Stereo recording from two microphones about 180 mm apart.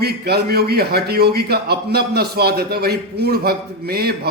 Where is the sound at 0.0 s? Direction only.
65° right (ahead or behind).